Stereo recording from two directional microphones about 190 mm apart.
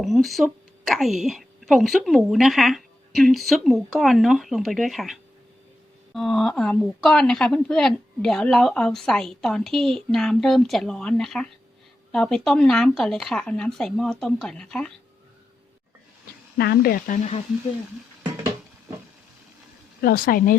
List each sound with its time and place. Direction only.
0.0 s a woman's voice: centre (ahead or behind)
16.6 s speech: 55° left (ahead or behind)
20.0 s speech: 55° left (ahead or behind)